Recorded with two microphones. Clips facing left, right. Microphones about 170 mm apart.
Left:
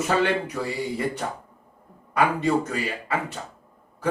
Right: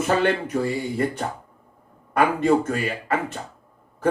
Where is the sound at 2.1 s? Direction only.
50° right (ahead or behind).